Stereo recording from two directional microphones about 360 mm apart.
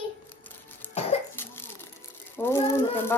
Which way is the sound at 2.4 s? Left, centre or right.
Centre.